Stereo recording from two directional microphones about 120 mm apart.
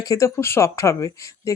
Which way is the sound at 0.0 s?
25° left (ahead or behind).